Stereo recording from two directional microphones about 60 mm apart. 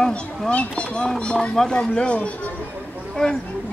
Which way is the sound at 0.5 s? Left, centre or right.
Centre.